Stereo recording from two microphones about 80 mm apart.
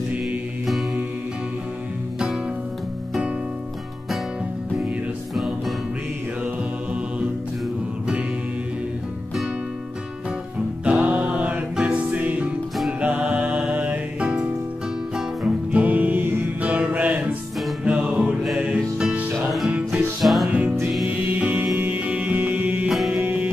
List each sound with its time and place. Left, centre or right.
5.3 s music: centre
6.4 s mantra: centre
10.9 s music: centre
20.4 s music: centre
22.8 s music: centre
23.1 s music: centre